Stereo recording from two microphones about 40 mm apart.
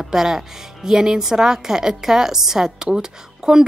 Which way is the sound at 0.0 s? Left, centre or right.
Centre.